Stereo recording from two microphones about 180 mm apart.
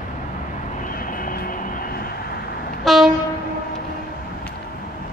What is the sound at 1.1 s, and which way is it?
Vehicle, 50° left (ahead or behind).